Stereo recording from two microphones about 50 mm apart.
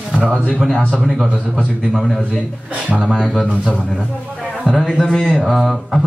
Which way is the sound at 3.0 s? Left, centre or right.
Centre.